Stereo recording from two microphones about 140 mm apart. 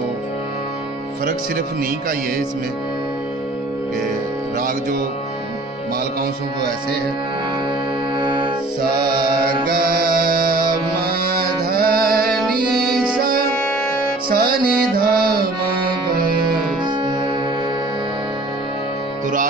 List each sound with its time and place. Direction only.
9.7 s music: 90° right